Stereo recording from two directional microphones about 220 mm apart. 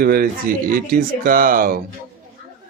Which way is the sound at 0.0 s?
40° right (ahead or behind).